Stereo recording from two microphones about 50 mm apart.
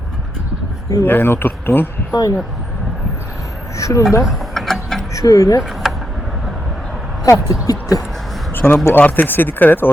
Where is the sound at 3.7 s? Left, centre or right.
Left.